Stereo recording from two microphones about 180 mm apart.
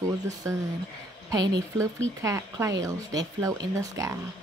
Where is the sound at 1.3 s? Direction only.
20° right (ahead or behind).